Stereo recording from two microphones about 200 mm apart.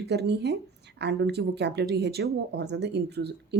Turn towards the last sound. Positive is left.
turn(degrees=-55)  # may be behind; listen again after turning